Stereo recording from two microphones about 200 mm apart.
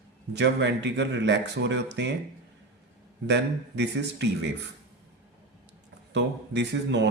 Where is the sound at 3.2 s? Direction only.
60° right (ahead or behind).